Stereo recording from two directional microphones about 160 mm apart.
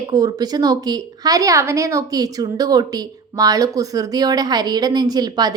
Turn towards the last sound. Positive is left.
turn(degrees=-25)  # may be behind; listen again after turning